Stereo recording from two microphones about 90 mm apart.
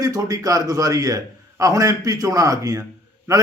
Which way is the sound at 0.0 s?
40° right (ahead or behind).